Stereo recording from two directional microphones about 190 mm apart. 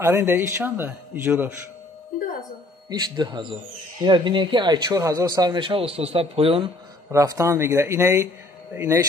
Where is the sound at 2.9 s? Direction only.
20° right (ahead or behind).